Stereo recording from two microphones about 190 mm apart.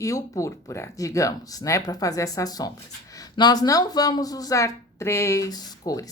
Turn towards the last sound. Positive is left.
turn(degrees=20)  # may be behind; listen again after turning